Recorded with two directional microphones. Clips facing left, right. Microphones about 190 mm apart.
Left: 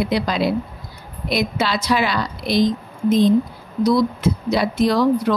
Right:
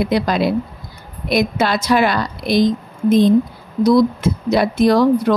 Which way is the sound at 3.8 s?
50° right (ahead or behind).